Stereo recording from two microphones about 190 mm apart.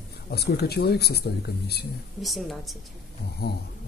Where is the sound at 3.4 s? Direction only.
55° left (ahead or behind).